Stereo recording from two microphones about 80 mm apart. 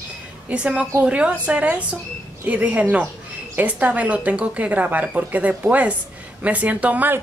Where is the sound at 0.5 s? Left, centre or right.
Centre.